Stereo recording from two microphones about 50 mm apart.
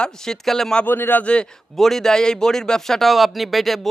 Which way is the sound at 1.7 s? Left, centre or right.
Centre.